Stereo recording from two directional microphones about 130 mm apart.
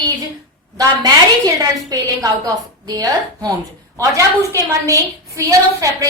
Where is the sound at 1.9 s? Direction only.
30° right (ahead or behind).